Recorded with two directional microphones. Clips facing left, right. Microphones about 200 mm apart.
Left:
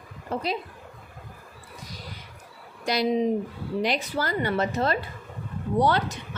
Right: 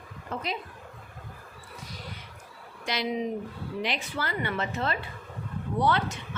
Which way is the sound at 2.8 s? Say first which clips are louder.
Left 6 dB; 40° left (ahead or behind).